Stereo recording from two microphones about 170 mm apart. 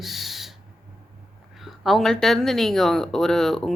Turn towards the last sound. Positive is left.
turn(degrees=0)  # may be behind; listen again after turning